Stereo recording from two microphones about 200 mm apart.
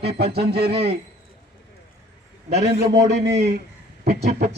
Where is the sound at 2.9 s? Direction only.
55° right (ahead or behind).